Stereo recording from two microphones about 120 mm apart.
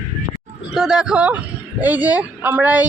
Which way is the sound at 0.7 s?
5° right (ahead or behind).